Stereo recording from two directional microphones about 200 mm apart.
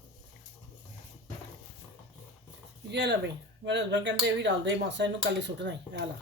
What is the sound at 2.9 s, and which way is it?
Speech, 60° right (ahead or behind).